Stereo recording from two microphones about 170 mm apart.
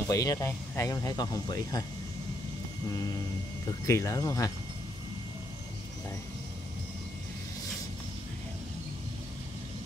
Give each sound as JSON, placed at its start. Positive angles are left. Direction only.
{"t": 0.1, "sound": "speech", "side_deg": 20}
{"t": 3.8, "sound": "speech", "side_deg": 15}